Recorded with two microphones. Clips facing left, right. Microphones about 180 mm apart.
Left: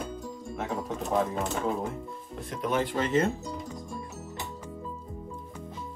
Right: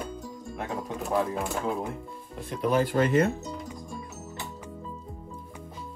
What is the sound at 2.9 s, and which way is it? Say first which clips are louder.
Speech: right 2 dB; 55° right (ahead or behind).